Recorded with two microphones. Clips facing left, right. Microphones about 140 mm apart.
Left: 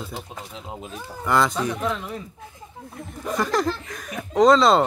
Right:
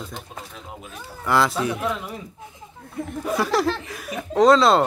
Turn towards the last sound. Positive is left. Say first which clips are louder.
# even
turn(degrees=0)  # may be behind; listen again after turning